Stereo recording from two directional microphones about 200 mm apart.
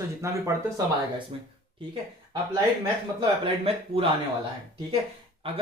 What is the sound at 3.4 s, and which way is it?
Speech, 30° right (ahead or behind).